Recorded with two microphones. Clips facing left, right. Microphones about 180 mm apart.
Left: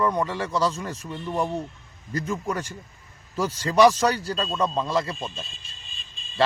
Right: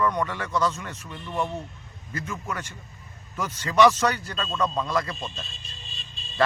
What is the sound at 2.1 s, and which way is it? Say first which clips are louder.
Speech: left 5 dB; 35° left (ahead or behind).